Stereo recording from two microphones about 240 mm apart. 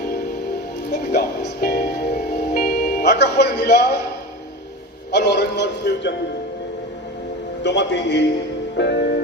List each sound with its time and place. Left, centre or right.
0.9 s music: left
5.1 s a man's voice: left
7.6 s a man's voice: left
8.7 s music: left